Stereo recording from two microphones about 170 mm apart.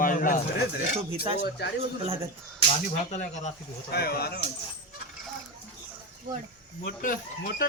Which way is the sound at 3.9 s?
65° left (ahead or behind).